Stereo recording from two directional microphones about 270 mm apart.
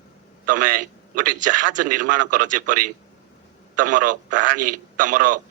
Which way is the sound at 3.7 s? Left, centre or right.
Right.